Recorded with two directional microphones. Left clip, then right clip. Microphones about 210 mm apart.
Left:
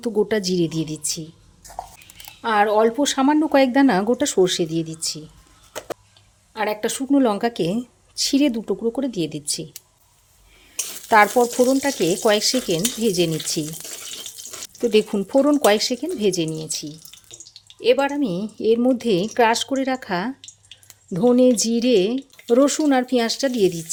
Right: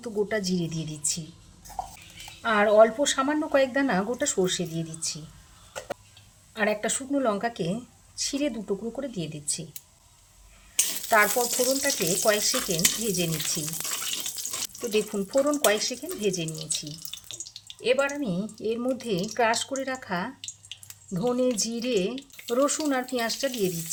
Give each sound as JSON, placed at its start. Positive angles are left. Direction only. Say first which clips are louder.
{"t": 0.0, "sound": "speech", "louder": "left 7 dB", "side_deg": 45}
{"t": 2.4, "sound": "speech", "louder": "left 2 dB", "side_deg": 50}
{"t": 6.5, "sound": "speech", "louder": "left 3 dB", "side_deg": 50}
{"t": 11.1, "sound": "speech", "louder": "left 8 dB", "side_deg": 50}
{"t": 14.8, "sound": "speech", "louder": "left 9 dB", "side_deg": 45}
{"t": 17.8, "sound": "speech", "louder": "left 6 dB", "side_deg": 50}